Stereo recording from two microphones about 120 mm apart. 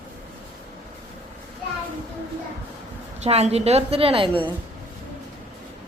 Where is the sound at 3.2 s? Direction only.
60° right (ahead or behind).